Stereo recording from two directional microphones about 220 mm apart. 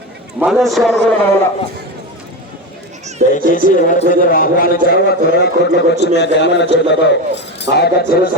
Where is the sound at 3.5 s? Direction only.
35° left (ahead or behind).